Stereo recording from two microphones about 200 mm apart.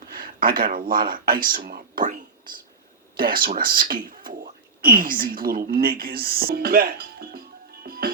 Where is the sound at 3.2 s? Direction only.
45° right (ahead or behind).